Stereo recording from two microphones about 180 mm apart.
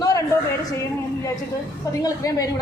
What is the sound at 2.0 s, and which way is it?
Speech, 20° left (ahead or behind).